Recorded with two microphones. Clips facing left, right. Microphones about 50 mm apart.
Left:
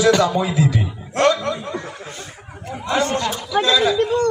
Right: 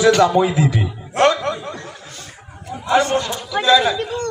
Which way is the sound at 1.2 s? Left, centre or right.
Right.